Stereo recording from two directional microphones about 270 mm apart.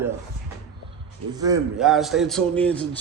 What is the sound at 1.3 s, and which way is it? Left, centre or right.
Speech, centre.